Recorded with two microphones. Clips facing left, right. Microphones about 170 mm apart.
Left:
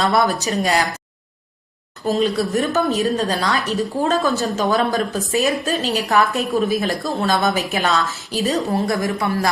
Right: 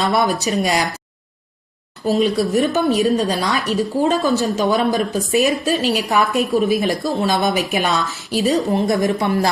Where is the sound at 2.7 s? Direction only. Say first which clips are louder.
Right 2 dB; 15° right (ahead or behind).